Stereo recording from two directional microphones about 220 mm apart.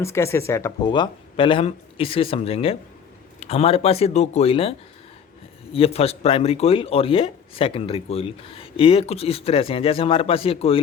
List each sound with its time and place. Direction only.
0.0 s a man's voice: 10° left (ahead or behind)
5.7 s a man's voice: 25° left (ahead or behind)